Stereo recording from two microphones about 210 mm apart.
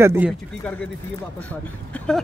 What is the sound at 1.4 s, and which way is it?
Speech, 5° left (ahead or behind).